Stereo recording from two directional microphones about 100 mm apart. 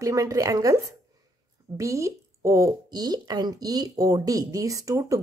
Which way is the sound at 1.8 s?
30° right (ahead or behind).